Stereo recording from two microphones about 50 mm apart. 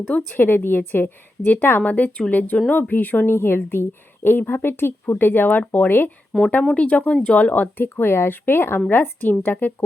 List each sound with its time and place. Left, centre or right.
0.3 s a woman's voice: left
1.8 s a woman's voice: left
2.9 s a woman's voice: left
3.3 s a woman's voice: left
6.3 s speech: centre
6.7 s speech: left
7.8 s a woman's voice: left